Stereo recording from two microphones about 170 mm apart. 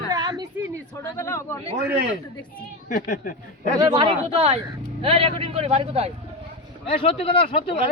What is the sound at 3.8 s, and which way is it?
A man's voice, 25° right (ahead or behind).